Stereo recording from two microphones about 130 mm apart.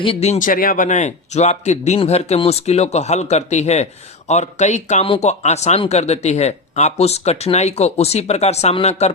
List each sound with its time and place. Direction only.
0.0 s speech: 50° left (ahead or behind)
0.3 s speech: 90° left; by 5.0 s 60° left (ahead or behind)
5.0 s speech: 45° left (ahead or behind)
5.3 s speech: 60° left (ahead or behind)